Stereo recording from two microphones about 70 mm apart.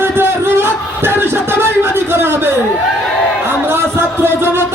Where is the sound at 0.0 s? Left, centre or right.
Right.